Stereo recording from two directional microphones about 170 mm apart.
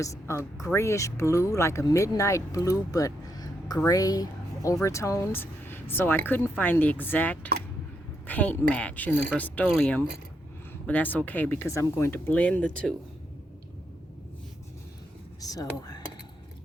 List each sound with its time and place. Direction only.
0.0 s speech: 15° left (ahead or behind)
2.9 s a sound: 20° left (ahead or behind)
3.8 s speech: 20° left (ahead or behind)
15.4 s speech: 20° left (ahead or behind)